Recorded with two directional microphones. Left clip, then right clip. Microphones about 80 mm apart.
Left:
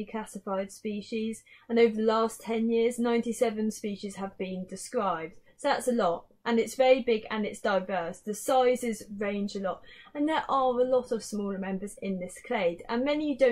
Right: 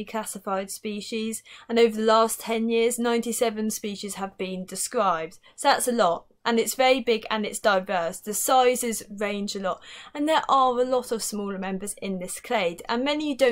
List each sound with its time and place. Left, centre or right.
0.0 s speech: right